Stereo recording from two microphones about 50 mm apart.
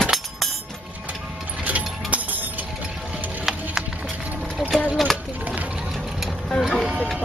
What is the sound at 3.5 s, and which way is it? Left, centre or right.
Music, centre.